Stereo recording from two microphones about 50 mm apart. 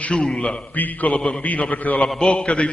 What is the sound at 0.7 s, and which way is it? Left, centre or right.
Speech, left.